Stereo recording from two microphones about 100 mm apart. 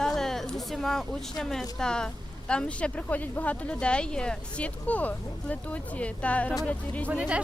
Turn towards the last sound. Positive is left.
turn(degrees=-15)  # may be behind; listen again after turning